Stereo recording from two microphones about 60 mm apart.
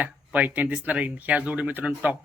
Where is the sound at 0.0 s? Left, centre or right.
Right.